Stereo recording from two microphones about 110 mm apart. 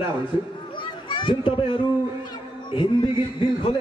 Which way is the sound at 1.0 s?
50° left (ahead or behind).